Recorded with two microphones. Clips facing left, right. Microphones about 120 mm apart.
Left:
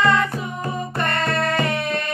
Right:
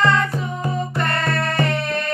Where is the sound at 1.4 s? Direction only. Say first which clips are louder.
Even; 30° right (ahead or behind).